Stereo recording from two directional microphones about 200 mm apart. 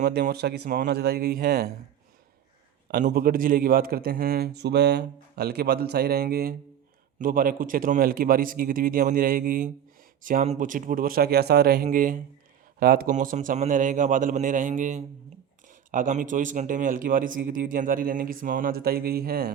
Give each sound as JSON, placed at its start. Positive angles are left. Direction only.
{"t": 0.0, "sound": "speech", "side_deg": -55}
{"t": 2.9, "sound": "a man's voice", "side_deg": -45}